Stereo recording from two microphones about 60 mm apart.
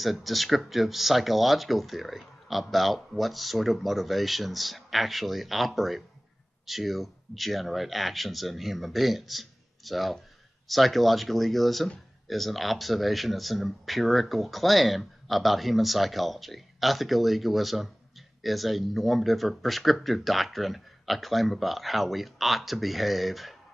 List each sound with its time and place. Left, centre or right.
0.0 s speech: centre